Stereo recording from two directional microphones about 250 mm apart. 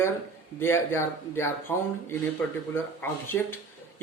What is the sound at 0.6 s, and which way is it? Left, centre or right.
Speech, centre.